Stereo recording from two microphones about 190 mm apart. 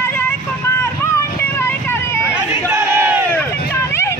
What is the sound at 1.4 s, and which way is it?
Vehicle, 10° left (ahead or behind).